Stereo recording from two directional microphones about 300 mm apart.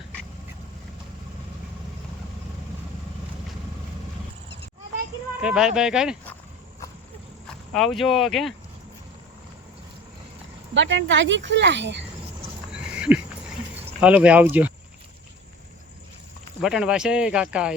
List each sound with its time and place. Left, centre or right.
5.4 s speech: centre
7.7 s speech: centre
10.8 s speech: right
13.0 s a sound: centre
14.0 s speech: centre
16.6 s speech: centre